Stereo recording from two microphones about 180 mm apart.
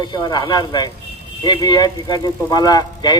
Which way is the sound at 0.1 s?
20° left (ahead or behind).